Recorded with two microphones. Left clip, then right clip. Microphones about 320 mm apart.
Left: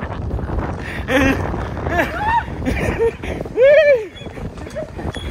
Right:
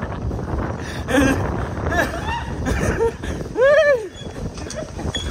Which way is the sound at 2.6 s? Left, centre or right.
Centre.